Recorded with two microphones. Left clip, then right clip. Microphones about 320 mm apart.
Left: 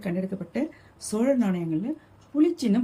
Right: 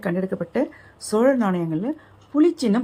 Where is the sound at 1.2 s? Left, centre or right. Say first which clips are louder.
Right 5 dB; right.